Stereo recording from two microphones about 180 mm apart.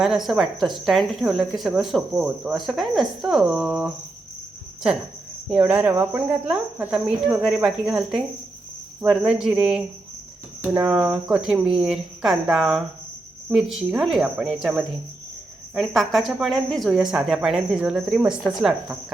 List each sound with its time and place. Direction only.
0.0 s a woman's voice: centre (ahead or behind)
5.5 s cricket: 5° right (ahead or behind)
7.4 s a woman's voice: 5° right (ahead or behind)